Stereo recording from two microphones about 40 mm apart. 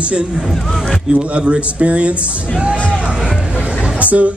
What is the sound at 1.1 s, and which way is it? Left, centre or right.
A man's voice, right.